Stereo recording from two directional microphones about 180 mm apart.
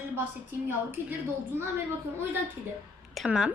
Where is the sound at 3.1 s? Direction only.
Centre (ahead or behind).